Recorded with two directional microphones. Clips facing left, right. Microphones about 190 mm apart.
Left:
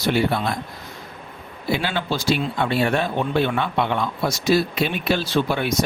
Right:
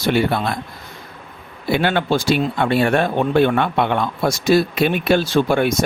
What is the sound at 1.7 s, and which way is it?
Speech, 60° right (ahead or behind).